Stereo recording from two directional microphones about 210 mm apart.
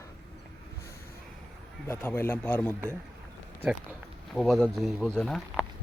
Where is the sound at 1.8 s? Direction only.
10° left (ahead or behind).